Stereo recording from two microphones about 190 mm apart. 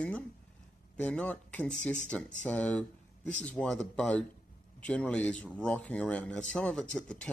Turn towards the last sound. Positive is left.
turn(degrees=5)  # may be behind; listen again after turning